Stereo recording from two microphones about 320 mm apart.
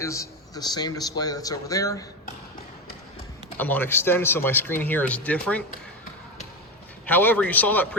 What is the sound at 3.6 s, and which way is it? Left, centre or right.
Speech, centre.